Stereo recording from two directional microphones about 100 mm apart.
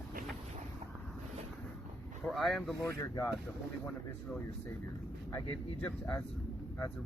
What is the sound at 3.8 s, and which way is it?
Speech, 15° left (ahead or behind).